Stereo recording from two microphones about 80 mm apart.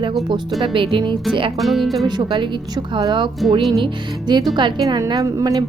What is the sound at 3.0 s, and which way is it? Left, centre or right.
Speech, right.